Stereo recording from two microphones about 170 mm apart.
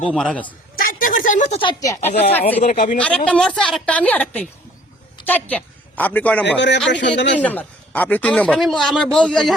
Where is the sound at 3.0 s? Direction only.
10° left (ahead or behind).